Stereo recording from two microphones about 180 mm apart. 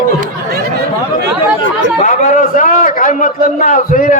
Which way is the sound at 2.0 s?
45° left (ahead or behind).